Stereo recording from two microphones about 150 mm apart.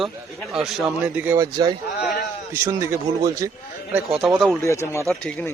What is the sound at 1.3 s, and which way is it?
Speech, 25° right (ahead or behind).